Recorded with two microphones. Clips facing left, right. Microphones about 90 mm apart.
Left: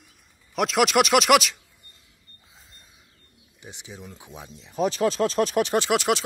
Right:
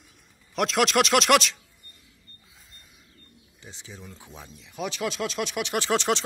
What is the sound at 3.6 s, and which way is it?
Speech, 15° left (ahead or behind).